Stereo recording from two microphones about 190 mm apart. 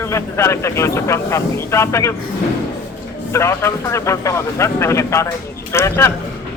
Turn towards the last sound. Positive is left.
turn(degrees=15)  # may be behind; listen again after turning